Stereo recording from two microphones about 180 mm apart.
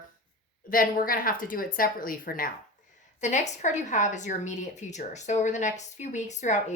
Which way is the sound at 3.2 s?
40° left (ahead or behind).